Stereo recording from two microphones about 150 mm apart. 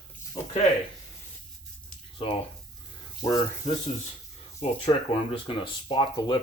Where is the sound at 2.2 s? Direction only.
35° left (ahead or behind).